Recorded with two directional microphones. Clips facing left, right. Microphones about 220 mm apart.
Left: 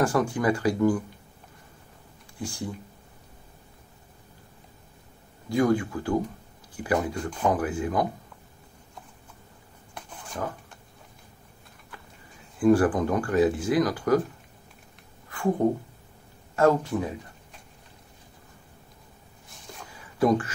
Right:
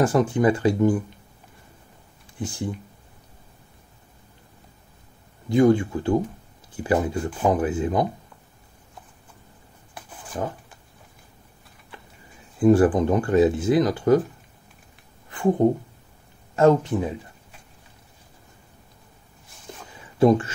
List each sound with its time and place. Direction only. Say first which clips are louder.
0.0 s speech: right 4 dB; 20° right (ahead or behind)
5.5 s speech: right 5 dB; 25° right (ahead or behind)
10.3 s speech: right 4 dB; 25° right (ahead or behind)
12.5 s speech: right 3 dB; 20° right (ahead or behind)
15.2 s a sound: right 4 dB; 20° right (ahead or behind)
16.5 s speech: right 4 dB; 20° right (ahead or behind)
20.2 s speech: right 5 dB; 25° right (ahead or behind)